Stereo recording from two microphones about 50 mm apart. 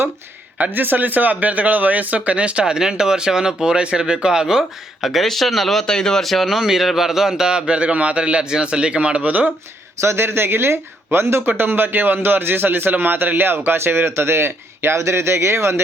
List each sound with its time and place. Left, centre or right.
0.6 s speech: right
2.7 s speech: centre
10.0 s speech: right
14.9 s speech: right